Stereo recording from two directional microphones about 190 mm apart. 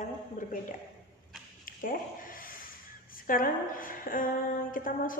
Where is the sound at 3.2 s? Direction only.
45° left (ahead or behind).